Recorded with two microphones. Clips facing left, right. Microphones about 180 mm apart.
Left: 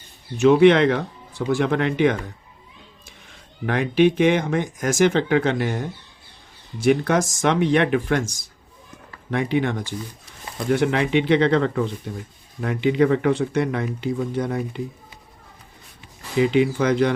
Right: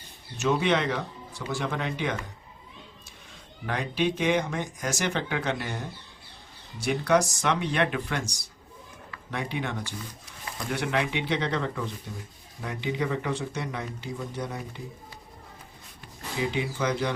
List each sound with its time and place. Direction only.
0.3 s speech: 60° left (ahead or behind)
3.7 s speech: 65° left (ahead or behind)
16.4 s speech: 65° left (ahead or behind)